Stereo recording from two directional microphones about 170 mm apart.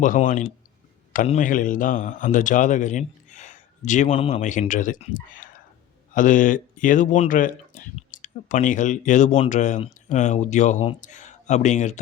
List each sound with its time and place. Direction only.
0.0 s a man's voice: 50° left (ahead or behind)